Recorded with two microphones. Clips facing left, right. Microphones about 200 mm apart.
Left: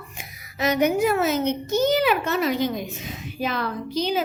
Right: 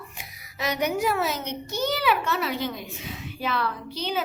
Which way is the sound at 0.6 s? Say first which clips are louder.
Left 5 dB; 50° left (ahead or behind).